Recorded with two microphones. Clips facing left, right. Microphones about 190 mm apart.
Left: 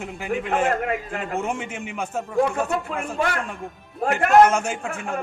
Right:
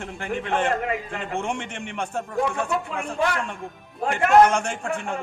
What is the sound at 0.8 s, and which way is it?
Speech, 50° left (ahead or behind).